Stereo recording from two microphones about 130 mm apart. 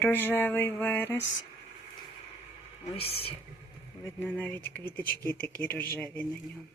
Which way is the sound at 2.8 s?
50° left (ahead or behind).